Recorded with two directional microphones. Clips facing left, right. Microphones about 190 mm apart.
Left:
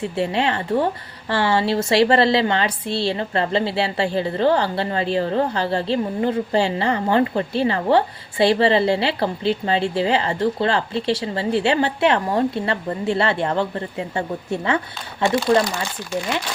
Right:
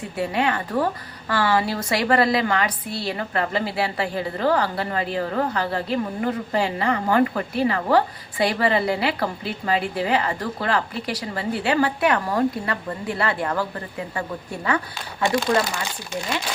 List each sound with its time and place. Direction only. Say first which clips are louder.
0.2 s a woman's voice: left 1 dB; 25° left (ahead or behind)